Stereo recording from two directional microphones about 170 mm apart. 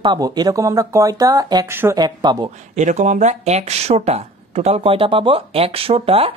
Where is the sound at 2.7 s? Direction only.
45° right (ahead or behind).